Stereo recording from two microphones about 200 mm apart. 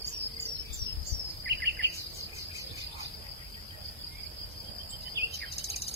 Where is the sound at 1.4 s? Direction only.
55° right (ahead or behind).